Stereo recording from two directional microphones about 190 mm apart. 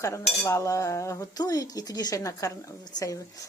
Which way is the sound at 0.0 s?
15° left (ahead or behind).